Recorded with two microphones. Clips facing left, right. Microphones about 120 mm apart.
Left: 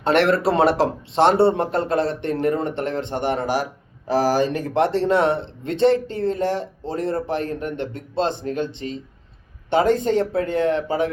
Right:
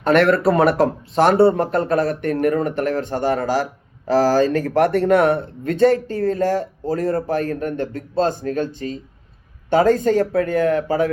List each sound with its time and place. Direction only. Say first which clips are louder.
0.0 s speech: right 3 dB; 25° left (ahead or behind)
9.6 s speech: right 3 dB; 25° left (ahead or behind)